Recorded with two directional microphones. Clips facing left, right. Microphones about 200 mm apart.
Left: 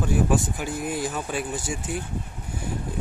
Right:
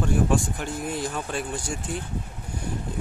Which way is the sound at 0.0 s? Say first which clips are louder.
Even; 5° left (ahead or behind).